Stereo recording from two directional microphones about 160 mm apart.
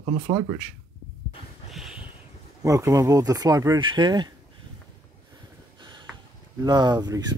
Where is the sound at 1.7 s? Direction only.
Centre (ahead or behind).